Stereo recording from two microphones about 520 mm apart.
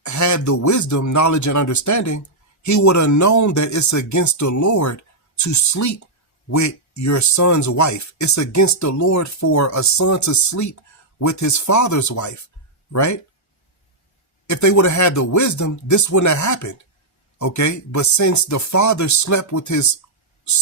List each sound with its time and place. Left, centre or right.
0.0 s speech: left
14.4 s speech: left